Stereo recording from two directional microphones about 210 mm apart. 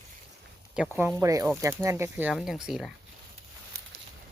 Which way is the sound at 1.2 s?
15° right (ahead or behind).